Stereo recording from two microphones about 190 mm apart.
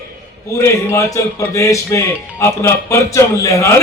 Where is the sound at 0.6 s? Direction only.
15° left (ahead or behind).